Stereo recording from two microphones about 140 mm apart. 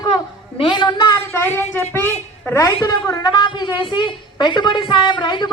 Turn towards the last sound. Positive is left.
turn(degrees=35)  # may be behind; listen again after turning